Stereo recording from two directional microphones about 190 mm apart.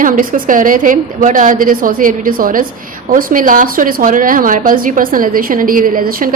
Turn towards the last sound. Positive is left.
turn(degrees=-50)  # may be behind; listen again after turning